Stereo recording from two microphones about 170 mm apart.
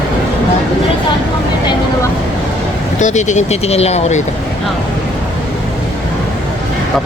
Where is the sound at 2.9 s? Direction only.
45° left (ahead or behind).